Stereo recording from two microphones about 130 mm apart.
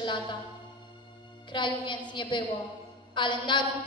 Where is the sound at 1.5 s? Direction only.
40° left (ahead or behind).